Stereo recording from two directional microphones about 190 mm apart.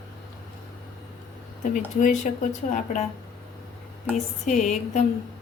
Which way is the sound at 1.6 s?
40° left (ahead or behind).